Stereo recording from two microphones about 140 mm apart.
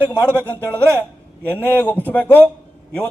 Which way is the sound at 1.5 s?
15° left (ahead or behind).